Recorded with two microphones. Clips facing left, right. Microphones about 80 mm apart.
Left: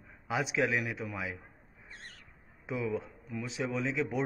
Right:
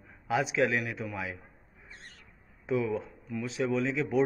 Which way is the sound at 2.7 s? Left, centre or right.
Centre.